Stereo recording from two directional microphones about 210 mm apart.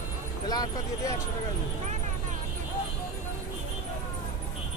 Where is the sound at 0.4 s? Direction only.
20° left (ahead or behind).